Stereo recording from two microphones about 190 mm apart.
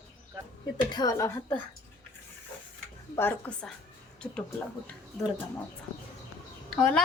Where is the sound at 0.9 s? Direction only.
20° left (ahead or behind).